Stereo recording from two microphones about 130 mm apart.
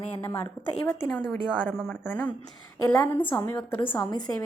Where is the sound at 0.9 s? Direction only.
10° left (ahead or behind).